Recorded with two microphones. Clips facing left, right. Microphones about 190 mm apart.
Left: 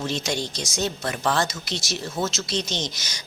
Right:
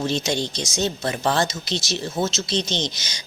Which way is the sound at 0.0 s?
25° right (ahead or behind).